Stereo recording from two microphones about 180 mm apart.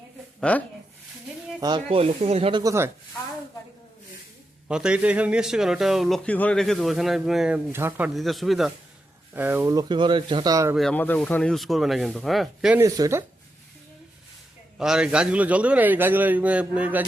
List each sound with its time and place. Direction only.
0.3 s speech: 5° left (ahead or behind)
1.6 s speech: 25° right (ahead or behind)
4.7 s a man's voice: 5° right (ahead or behind)
9.3 s speech: 10° right (ahead or behind)
10.8 s a man's voice: 5° left (ahead or behind)
12.8 s a man's voice: 15° right (ahead or behind)
14.8 s a man's voice: 5° right (ahead or behind)